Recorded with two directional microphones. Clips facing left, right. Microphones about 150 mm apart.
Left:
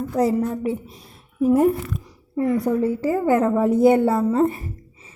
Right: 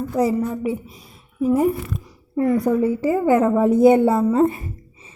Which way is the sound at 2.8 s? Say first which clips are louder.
Right 2 dB; 15° right (ahead or behind).